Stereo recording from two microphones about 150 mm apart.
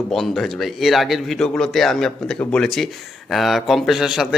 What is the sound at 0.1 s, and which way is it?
Speech, centre (ahead or behind).